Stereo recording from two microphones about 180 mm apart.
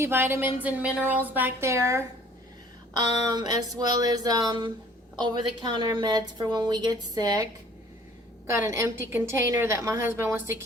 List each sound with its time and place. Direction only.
0.0 s a woman's voice: 10° right (ahead or behind)
8.4 s a woman's voice: 15° right (ahead or behind)